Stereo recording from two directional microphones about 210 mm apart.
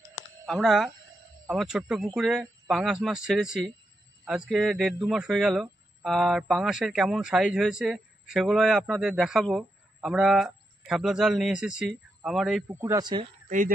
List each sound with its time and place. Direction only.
0.5 s speech: centre (ahead or behind)
12.6 s speech: 10° right (ahead or behind)